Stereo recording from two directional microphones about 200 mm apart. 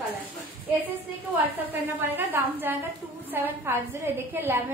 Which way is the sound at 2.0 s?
10° right (ahead or behind).